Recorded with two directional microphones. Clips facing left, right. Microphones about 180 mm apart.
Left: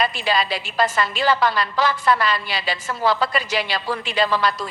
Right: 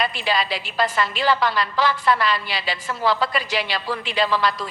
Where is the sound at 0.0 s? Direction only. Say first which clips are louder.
Left 2 dB; 40° left (ahead or behind).